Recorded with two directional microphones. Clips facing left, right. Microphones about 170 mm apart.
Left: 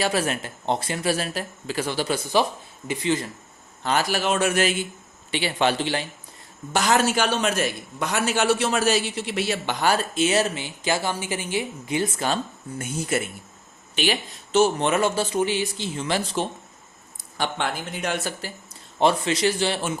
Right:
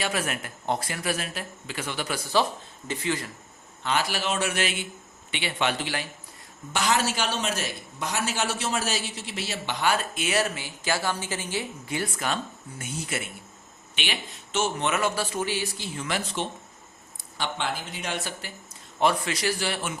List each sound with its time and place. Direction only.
0.0 s speech: 30° left (ahead or behind)
2.3 s speech: 15° left (ahead or behind)
3.8 s speech: 45° left (ahead or behind); by 6.1 s 30° left (ahead or behind)
6.7 s a man's voice: 50° left (ahead or behind)
9.8 s speech: 35° left (ahead or behind)
12.8 s speech: 45° left (ahead or behind)
17.3 s speech: 50° left (ahead or behind)
18.9 s speech: 25° left (ahead or behind)